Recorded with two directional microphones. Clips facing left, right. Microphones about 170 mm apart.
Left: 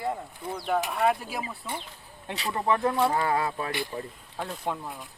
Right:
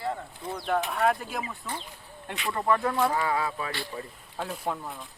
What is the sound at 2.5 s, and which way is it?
Speech, 20° left (ahead or behind).